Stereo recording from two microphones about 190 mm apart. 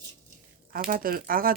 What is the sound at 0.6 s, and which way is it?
Speech, 50° right (ahead or behind).